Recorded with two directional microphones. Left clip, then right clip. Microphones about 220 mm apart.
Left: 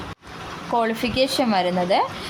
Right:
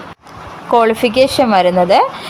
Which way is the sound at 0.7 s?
20° right (ahead or behind).